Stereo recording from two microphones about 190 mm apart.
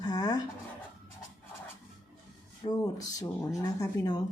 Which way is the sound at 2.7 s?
20° left (ahead or behind).